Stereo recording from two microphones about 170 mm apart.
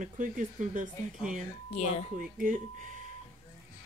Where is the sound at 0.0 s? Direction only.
50° right (ahead or behind).